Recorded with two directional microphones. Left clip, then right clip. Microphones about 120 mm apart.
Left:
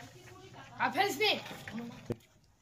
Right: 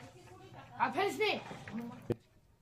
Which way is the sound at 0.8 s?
30° right (ahead or behind).